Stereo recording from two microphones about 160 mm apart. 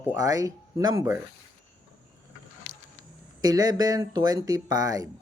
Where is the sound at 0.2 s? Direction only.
20° right (ahead or behind).